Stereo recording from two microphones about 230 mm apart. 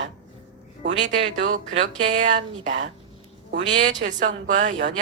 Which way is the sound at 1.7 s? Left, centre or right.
Right.